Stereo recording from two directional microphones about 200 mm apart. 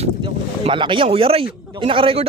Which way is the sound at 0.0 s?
30° right (ahead or behind).